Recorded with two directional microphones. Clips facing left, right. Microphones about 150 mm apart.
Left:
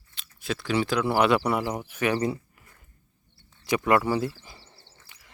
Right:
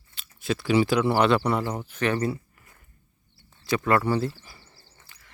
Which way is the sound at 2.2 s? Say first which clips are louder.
Even; 20° left (ahead or behind).